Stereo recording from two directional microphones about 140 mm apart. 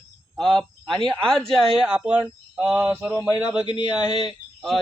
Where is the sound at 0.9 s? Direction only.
35° right (ahead or behind).